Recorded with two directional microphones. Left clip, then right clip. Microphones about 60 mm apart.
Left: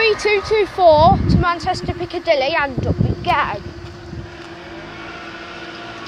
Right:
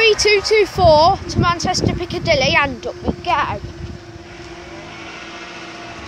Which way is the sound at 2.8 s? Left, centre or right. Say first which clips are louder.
Left 1 dB; right.